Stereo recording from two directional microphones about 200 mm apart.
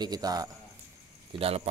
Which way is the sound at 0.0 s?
20° right (ahead or behind).